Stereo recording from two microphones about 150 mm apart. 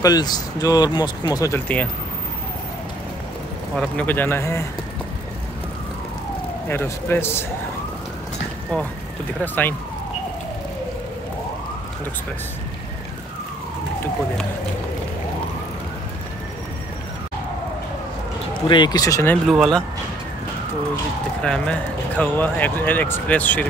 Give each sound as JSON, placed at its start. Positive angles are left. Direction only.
{"t": 0.0, "sound": "speech", "side_deg": 25}
{"t": 3.7, "sound": "speech", "side_deg": 5}
{"t": 6.7, "sound": "speech", "side_deg": 15}
{"t": 9.4, "sound": "speech", "side_deg": 15}
{"t": 18.7, "sound": "speech", "side_deg": 30}
{"t": 19.4, "sound": "speech", "side_deg": 0}
{"t": 21.4, "sound": "speech", "side_deg": 5}